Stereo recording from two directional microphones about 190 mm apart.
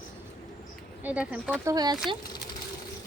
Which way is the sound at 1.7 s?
20° right (ahead or behind).